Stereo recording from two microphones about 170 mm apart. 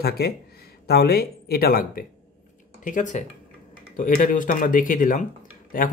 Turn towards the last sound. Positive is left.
turn(degrees=55)  # may be behind; listen again after turning